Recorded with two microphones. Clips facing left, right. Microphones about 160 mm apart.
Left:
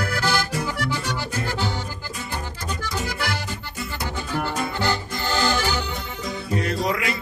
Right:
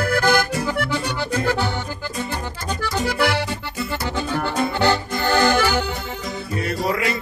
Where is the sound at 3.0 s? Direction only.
65° right (ahead or behind).